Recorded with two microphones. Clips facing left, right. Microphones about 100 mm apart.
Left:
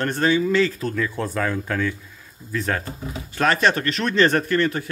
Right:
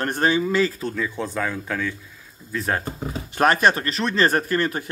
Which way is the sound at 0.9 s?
10° right (ahead or behind).